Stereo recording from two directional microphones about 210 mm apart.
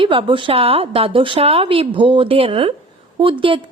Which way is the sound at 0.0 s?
25° right (ahead or behind).